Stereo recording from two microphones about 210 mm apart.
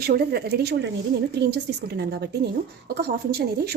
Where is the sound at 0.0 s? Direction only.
50° right (ahead or behind).